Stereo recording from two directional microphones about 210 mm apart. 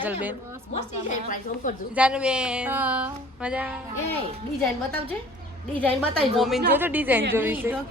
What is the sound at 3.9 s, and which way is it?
Speech, 10° left (ahead or behind).